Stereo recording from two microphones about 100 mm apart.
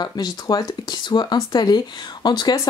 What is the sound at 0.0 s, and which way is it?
Speech, 40° left (ahead or behind).